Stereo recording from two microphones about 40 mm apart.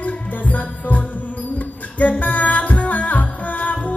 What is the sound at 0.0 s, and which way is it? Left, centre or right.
Music, left.